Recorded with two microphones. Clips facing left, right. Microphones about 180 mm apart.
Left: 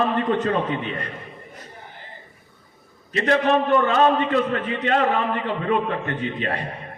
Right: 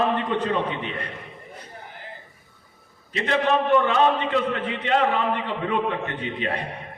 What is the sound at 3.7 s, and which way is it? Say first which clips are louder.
A man's voice: left 1 dB; 45° left (ahead or behind).